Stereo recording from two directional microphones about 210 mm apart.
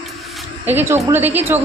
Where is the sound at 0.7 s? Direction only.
10° right (ahead or behind).